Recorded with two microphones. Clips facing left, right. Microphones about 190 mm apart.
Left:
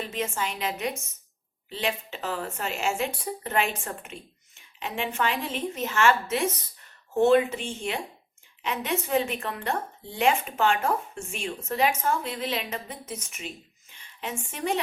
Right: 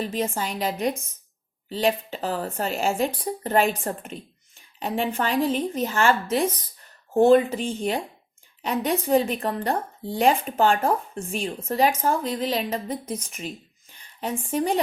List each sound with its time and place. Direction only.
0.0 s a woman's voice: 35° right (ahead or behind)